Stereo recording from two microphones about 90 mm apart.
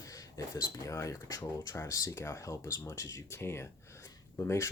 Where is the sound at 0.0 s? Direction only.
40° left (ahead or behind).